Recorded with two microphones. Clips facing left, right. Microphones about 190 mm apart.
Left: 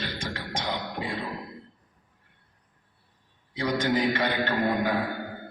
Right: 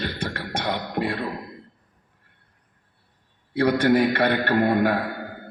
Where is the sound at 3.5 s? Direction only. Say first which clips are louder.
Right 7 dB; 65° right (ahead or behind).